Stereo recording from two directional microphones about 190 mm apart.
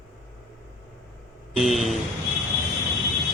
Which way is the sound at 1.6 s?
Centre (ahead or behind).